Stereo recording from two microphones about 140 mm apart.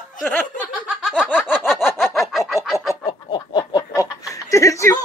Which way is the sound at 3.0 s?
30° left (ahead or behind).